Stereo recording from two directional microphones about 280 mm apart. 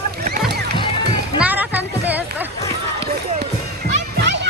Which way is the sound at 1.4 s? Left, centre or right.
Centre.